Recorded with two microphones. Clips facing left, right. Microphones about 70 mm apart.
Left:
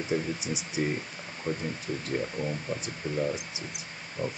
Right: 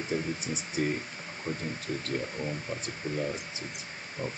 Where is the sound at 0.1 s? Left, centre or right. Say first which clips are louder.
Left 3 dB; left.